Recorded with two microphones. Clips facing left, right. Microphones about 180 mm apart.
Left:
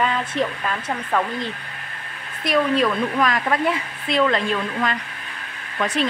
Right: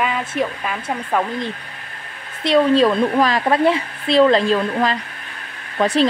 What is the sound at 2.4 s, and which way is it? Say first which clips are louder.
A woman's voice: right 5 dB; 30° right (ahead or behind).